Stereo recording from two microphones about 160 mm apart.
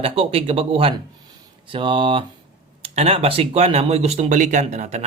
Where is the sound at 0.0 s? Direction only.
35° right (ahead or behind).